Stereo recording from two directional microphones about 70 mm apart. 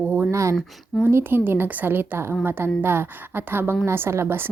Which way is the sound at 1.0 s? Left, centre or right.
Right.